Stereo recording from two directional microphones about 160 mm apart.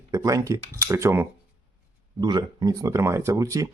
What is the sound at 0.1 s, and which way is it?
Speech, 20° right (ahead or behind).